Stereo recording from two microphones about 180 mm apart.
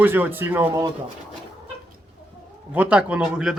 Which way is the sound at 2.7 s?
10° right (ahead or behind).